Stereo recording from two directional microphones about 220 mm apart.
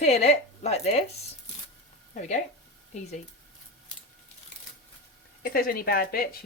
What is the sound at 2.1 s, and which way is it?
Speech, 30° left (ahead or behind).